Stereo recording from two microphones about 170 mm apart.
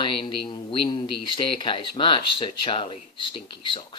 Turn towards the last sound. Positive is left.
turn(degrees=30)  # may be behind; listen again after turning